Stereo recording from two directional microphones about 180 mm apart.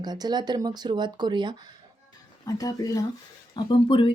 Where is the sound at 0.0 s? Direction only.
20° right (ahead or behind).